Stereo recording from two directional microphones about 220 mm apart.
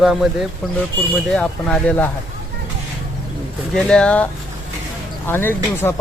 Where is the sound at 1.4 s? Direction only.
5° left (ahead or behind).